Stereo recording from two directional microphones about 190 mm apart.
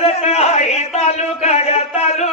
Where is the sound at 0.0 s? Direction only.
35° left (ahead or behind).